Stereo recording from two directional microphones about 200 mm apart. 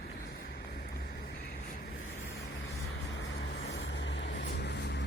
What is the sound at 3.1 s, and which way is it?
Vehicle, 65° left (ahead or behind).